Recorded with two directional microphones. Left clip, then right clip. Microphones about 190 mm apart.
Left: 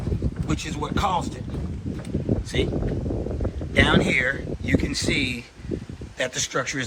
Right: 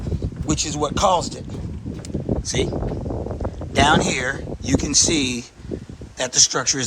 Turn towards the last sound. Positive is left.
turn(degrees=-5)  # may be behind; listen again after turning